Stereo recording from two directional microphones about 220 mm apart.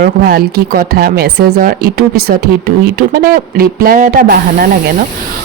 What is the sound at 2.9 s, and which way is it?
Speech, 45° right (ahead or behind).